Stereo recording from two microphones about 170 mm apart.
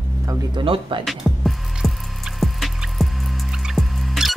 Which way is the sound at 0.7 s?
30° right (ahead or behind).